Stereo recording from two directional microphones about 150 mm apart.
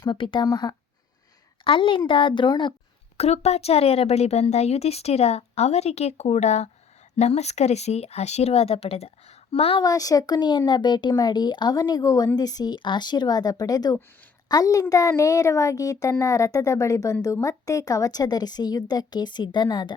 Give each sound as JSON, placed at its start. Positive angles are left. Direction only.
{"t": 0.0, "sound": "speech", "side_deg": 30}
{"t": 1.6, "sound": "a woman's voice", "side_deg": 35}
{"t": 3.2, "sound": "a woman's voice", "side_deg": 45}
{"t": 9.8, "sound": "speech", "side_deg": 25}